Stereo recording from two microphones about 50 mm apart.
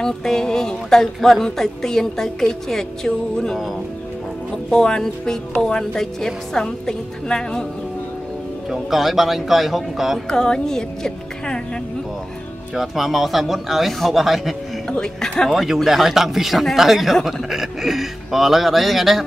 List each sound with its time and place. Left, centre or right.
0.0 s speech: centre
4.6 s speech: centre
8.6 s speech: centre
10.2 s speech: centre
12.7 s speech: centre
14.9 s speech: centre
15.5 s speech: centre